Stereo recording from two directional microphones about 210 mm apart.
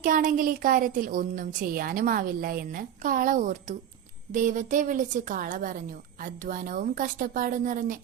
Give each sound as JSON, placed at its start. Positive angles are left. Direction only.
{"t": 0.0, "sound": "a woman's voice", "side_deg": -40}